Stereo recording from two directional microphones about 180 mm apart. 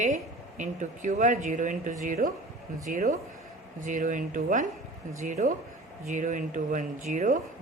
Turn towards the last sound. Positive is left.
turn(degrees=-45)  # may be behind; listen again after turning